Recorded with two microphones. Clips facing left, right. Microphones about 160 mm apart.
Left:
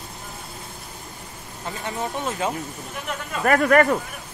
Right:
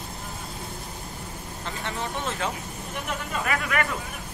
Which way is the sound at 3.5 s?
50° left (ahead or behind).